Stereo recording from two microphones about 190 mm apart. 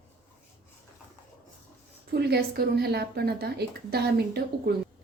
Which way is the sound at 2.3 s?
55° right (ahead or behind).